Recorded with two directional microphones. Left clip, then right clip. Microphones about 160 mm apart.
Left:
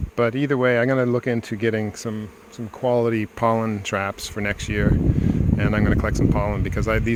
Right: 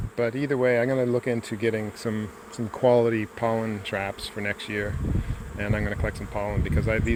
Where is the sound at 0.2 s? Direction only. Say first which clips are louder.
Left 4 dB; 50° left (ahead or behind).